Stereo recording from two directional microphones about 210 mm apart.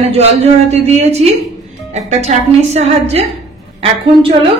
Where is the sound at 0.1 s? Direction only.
30° right (ahead or behind).